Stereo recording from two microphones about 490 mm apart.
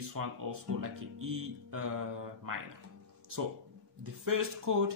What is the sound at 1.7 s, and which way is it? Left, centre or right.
Speech, right.